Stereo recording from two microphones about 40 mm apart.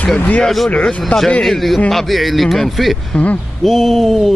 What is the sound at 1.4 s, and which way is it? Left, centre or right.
A man's voice, centre.